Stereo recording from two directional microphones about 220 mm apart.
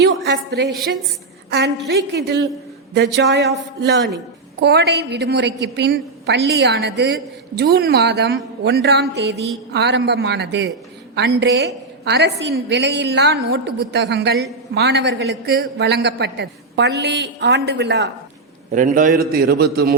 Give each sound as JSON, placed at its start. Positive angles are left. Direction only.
{"t": 0.3, "sound": "a woman's voice", "side_deg": -50}
{"t": 18.7, "sound": "a woman's voice", "side_deg": -35}